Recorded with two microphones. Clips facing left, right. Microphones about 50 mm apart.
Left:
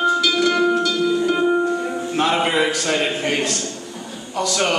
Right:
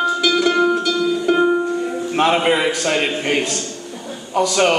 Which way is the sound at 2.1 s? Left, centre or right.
Centre.